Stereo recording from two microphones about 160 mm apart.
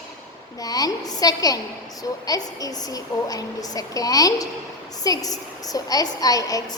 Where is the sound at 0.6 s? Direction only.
25° left (ahead or behind).